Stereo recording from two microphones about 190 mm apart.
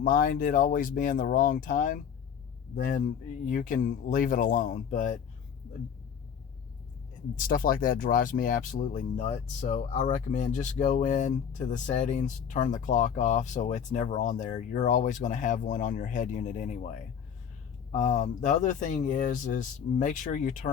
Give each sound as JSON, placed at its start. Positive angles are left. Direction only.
{"t": 0.0, "sound": "speech", "side_deg": 45}
{"t": 7.3, "sound": "speech", "side_deg": 45}